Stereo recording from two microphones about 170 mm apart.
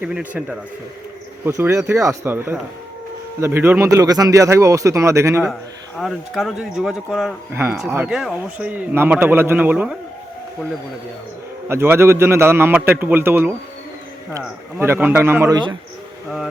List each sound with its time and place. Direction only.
0.0 s a man's voice: 10° right (ahead or behind)
1.5 s a man's voice: 15° right (ahead or behind)
6.0 s speech: centre (ahead or behind)
7.5 s a man's voice: 10° right (ahead or behind)
11.7 s a man's voice: 15° right (ahead or behind)
14.8 s a man's voice: 15° right (ahead or behind)